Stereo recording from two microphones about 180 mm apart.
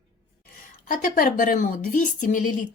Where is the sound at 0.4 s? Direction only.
50° left (ahead or behind).